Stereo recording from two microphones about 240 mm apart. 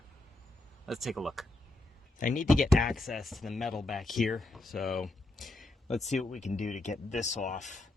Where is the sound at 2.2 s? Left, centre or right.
Left.